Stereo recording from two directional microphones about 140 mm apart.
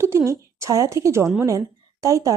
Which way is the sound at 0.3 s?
20° right (ahead or behind).